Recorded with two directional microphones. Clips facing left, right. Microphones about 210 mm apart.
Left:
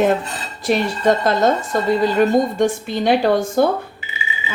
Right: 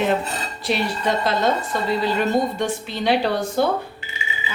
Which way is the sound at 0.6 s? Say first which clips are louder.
Left 6 dB; 45° left (ahead or behind).